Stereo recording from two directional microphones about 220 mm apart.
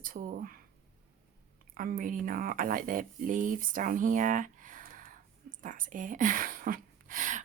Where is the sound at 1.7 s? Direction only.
40° right (ahead or behind).